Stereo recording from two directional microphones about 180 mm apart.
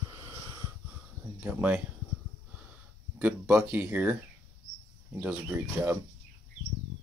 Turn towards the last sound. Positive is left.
turn(degrees=-10)  # may be behind; listen again after turning